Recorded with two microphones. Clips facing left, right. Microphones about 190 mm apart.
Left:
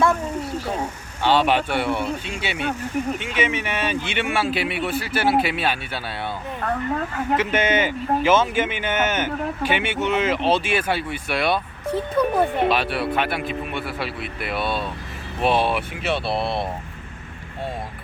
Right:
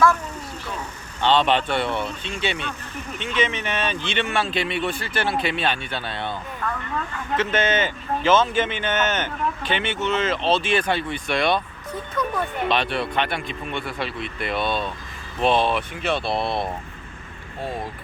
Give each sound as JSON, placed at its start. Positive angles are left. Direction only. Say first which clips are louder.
{"t": 1.2, "sound": "a man's voice", "louder": "even", "side_deg": 10}
{"t": 6.6, "sound": "speech", "louder": "left 6 dB", "side_deg": 45}
{"t": 7.3, "sound": "a man's voice", "louder": "even", "side_deg": 10}
{"t": 11.9, "sound": "speech", "louder": "left 7 dB", "side_deg": 30}
{"t": 12.7, "sound": "speech", "louder": "left 1 dB", "side_deg": 5}